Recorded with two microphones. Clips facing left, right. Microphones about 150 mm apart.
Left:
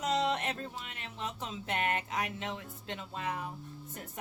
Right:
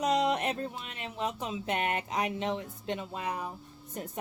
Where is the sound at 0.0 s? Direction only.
15° right (ahead or behind).